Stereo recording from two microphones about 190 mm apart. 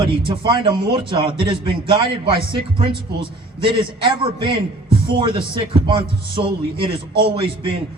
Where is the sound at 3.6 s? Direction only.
25° right (ahead or behind).